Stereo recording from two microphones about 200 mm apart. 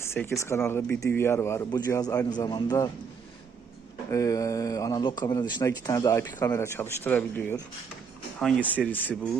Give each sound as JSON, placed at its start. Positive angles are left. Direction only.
{"t": 0.0, "sound": "speech", "side_deg": 10}
{"t": 4.1, "sound": "speech", "side_deg": 15}